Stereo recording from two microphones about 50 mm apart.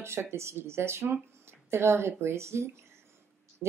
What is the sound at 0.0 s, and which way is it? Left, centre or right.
Speech, right.